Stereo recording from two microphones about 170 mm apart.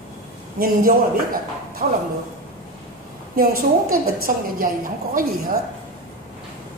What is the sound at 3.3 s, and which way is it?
A woman's voice, 60° right (ahead or behind).